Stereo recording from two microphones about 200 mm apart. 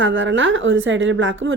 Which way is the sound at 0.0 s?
70° right (ahead or behind).